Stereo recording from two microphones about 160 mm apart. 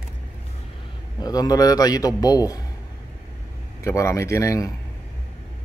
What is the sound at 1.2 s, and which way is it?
A man's voice, 25° left (ahead or behind).